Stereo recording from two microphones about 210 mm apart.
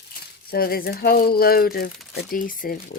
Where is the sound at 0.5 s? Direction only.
45° left (ahead or behind).